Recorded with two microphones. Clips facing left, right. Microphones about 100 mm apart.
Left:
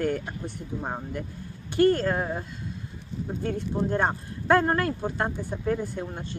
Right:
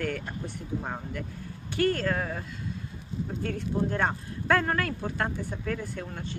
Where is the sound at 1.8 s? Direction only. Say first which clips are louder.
Left 5 dB; 30° left (ahead or behind).